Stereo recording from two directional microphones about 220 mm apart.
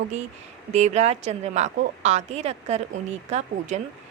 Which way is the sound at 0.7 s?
30° right (ahead or behind).